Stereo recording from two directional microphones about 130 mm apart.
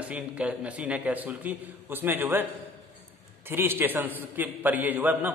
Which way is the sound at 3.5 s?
15° right (ahead or behind).